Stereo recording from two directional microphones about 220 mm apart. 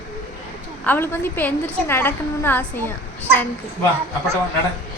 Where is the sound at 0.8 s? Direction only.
10° left (ahead or behind).